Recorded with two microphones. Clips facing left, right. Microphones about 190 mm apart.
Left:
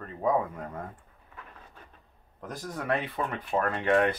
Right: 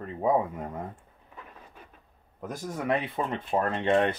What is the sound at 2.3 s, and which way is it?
Speech, 10° right (ahead or behind).